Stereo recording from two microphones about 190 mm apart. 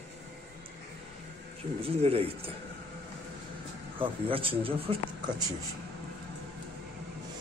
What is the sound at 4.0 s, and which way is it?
Speech, 30° right (ahead or behind).